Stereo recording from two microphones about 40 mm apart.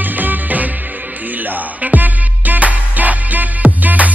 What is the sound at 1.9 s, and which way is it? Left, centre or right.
Music, right.